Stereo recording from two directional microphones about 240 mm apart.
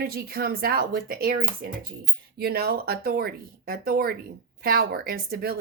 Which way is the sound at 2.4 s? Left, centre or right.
Right.